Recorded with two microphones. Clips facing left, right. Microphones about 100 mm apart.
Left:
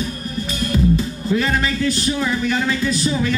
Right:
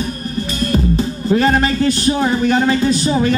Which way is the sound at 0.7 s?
55° right (ahead or behind).